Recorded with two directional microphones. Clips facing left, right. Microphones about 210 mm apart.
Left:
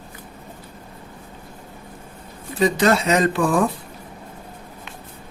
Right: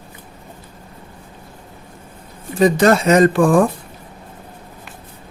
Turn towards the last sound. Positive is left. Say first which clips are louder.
# right 6 dB
turn(degrees=-50)  # may be behind; listen again after turning